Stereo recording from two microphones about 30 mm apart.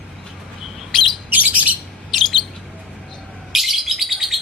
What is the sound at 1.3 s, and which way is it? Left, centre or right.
Bird, right.